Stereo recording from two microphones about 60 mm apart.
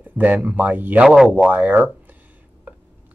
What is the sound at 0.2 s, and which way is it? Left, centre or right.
Speech, right.